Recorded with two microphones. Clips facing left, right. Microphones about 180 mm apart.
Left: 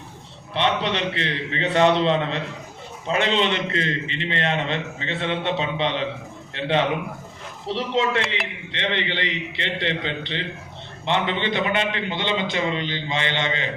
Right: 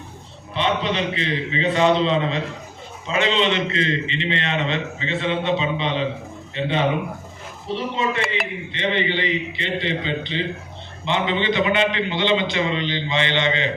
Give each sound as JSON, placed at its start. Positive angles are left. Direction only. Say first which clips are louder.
{"t": 0.5, "sound": "a man's voice", "louder": "right 1 dB", "side_deg": 70}
{"t": 11.0, "sound": "a man's voice", "louder": "right 2 dB", "side_deg": 55}